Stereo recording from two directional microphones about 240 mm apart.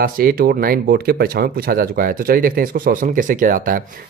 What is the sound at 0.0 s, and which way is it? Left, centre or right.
Speech, right.